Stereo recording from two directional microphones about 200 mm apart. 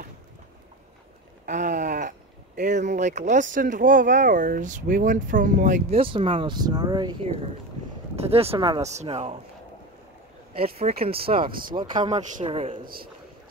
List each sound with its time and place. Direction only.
1.4 s speech: 40° right (ahead or behind); by 7.2 s 20° right (ahead or behind)
8.2 s speech: 30° right (ahead or behind)
10.6 s speech: 30° right (ahead or behind)
12.0 s a man's voice: 35° right (ahead or behind)
12.8 s a man's voice: 45° right (ahead or behind)